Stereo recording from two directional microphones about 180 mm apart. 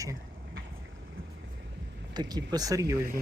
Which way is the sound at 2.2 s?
20° right (ahead or behind).